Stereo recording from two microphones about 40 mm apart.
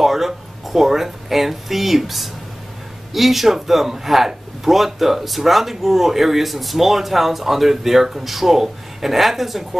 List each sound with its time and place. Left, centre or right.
0.0 s speech: centre